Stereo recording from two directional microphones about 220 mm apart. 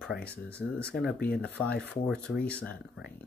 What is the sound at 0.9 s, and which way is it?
Speech, centre (ahead or behind).